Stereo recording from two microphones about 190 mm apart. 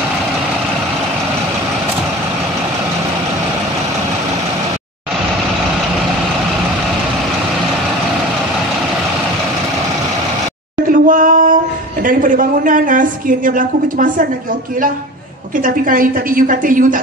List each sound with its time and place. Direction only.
10.9 s speech: 45° right (ahead or behind)
15.6 s a woman's voice: 45° right (ahead or behind)